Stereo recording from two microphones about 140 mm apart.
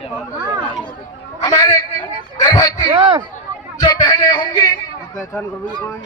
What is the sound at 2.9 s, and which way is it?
Speech, 40° right (ahead or behind).